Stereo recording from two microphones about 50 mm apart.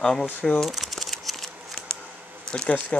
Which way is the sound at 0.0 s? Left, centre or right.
Centre.